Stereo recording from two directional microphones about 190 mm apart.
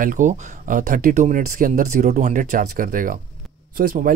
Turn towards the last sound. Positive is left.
turn(degrees=-50)  # may be behind; listen again after turning